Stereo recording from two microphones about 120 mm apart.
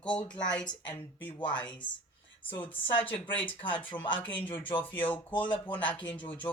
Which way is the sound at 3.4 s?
45° left (ahead or behind).